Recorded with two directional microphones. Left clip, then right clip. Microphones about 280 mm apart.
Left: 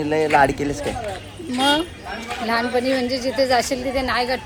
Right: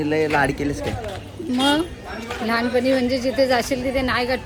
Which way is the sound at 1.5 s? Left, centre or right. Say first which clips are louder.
Left 1 dB; centre.